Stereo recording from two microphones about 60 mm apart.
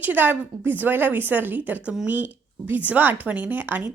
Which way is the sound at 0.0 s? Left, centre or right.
Right.